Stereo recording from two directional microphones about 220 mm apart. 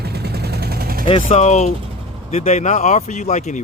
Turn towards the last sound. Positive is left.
turn(degrees=30)  # may be behind; listen again after turning